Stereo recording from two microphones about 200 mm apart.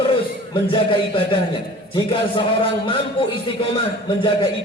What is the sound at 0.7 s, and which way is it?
A man's voice, 25° left (ahead or behind).